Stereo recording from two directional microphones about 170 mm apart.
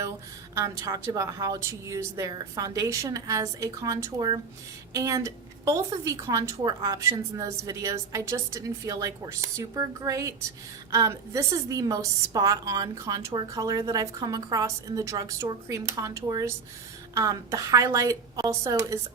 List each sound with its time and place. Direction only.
0.5 s a woman's voice: 20° right (ahead or behind)